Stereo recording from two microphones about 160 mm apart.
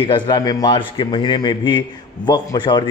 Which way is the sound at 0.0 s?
30° left (ahead or behind).